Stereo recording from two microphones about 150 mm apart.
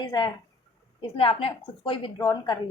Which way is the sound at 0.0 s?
30° left (ahead or behind).